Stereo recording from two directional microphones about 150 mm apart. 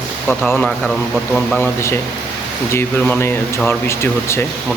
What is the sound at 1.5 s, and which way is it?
Speech, 15° left (ahead or behind).